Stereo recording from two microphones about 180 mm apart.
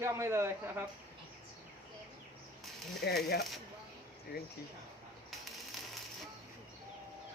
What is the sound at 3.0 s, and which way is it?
Speech, 60° left (ahead or behind).